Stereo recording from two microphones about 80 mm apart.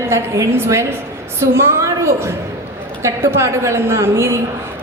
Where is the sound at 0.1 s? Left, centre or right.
Right.